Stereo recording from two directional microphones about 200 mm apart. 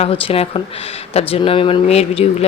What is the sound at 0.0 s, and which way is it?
Speech, 30° left (ahead or behind).